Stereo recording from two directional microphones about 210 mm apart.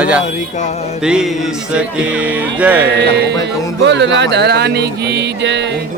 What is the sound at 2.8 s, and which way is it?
Music, 55° right (ahead or behind).